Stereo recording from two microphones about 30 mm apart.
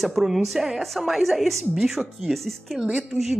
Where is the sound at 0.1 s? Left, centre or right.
Centre.